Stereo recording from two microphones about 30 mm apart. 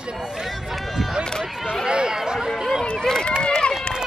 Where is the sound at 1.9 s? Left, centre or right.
Right.